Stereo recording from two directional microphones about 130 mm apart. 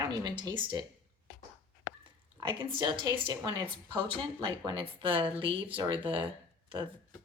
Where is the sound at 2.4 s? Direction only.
35° right (ahead or behind).